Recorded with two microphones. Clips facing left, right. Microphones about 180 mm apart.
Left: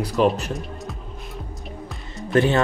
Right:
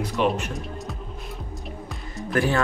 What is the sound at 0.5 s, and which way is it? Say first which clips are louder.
Music: left 1 dB; centre (ahead or behind).